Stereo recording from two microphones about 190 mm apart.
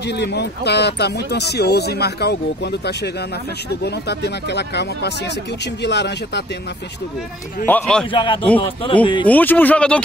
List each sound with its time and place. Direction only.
0.0 s speech: 65° left (ahead or behind)
7.6 s a man's voice: 5° left (ahead or behind)
8.1 s a man's voice: 25° left (ahead or behind)
9.3 s speech: 10° left (ahead or behind)